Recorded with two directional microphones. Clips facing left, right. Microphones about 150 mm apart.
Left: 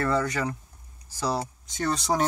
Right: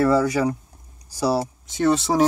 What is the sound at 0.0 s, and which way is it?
Speech, 10° right (ahead or behind).